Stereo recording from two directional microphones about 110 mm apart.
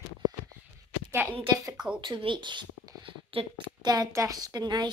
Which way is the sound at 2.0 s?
50° right (ahead or behind).